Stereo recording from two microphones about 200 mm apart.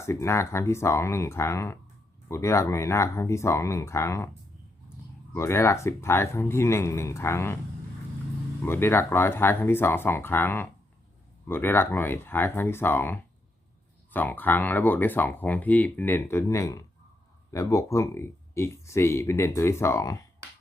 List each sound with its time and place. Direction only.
0.0 s speech: 15° left (ahead or behind)
5.3 s speech: 15° left (ahead or behind)
8.6 s speech: 10° left (ahead or behind)